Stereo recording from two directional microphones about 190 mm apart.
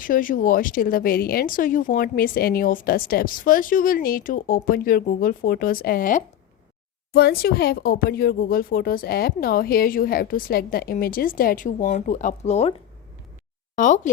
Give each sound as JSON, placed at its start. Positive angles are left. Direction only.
{"t": 0.0, "sound": "speech", "side_deg": 45}
{"t": 13.7, "sound": "speech", "side_deg": 40}